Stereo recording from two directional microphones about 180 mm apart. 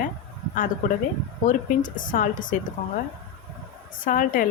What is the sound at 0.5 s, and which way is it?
A woman's voice, 50° left (ahead or behind).